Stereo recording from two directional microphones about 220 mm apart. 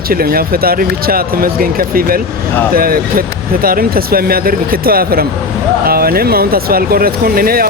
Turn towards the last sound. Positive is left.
turn(degrees=-40)  # may be behind; listen again after turning